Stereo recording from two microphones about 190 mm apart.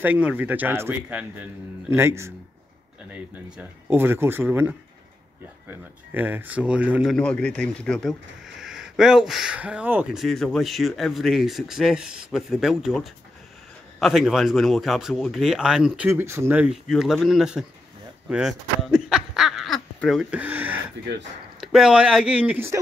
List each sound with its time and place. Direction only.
0.0 s a man's voice: 10° right (ahead or behind)
7.2 s speech: 5° left (ahead or behind)
18.3 s a sound: centre (ahead or behind)
21.5 s speech: 5° right (ahead or behind)